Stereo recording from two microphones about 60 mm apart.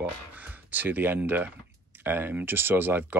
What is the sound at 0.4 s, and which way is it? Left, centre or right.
Speech, right.